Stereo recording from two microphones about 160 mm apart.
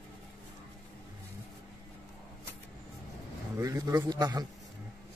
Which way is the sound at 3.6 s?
20° right (ahead or behind).